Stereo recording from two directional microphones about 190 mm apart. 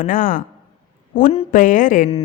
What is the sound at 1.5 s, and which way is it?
Speech, 45° left (ahead or behind).